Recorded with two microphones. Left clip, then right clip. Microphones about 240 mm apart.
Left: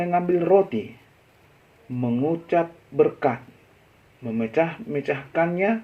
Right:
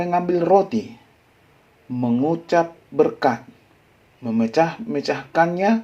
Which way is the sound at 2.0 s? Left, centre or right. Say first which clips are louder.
Right 3 dB; right.